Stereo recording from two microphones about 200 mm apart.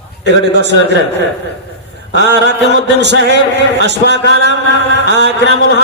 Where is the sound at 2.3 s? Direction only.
60° right (ahead or behind).